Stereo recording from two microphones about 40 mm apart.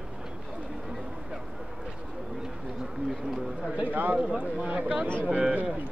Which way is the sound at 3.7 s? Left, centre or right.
Right.